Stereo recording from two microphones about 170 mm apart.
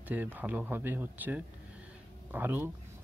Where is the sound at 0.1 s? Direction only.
10° right (ahead or behind).